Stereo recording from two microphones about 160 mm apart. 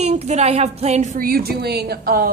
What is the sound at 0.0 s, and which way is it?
Music, 45° right (ahead or behind).